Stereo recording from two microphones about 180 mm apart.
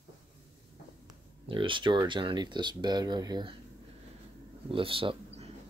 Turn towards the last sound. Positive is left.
turn(degrees=-30)  # may be behind; listen again after turning